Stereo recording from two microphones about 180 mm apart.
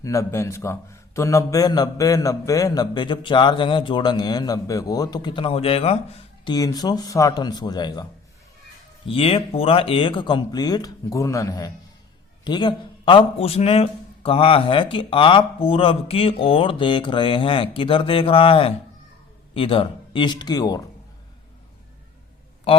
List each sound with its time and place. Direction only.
0.0 s a man's voice: 15° left (ahead or behind)
9.0 s a man's voice: 30° left (ahead or behind)